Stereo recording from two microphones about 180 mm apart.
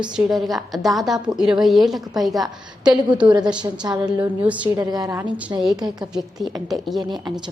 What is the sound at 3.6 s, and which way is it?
Speech, 25° right (ahead or behind).